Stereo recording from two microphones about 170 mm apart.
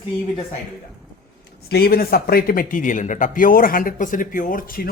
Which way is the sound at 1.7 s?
60° left (ahead or behind).